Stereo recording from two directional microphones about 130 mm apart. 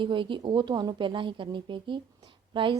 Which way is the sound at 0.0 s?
40° right (ahead or behind).